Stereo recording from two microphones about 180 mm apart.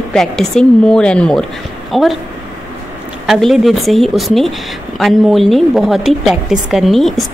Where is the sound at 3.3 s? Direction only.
Centre (ahead or behind).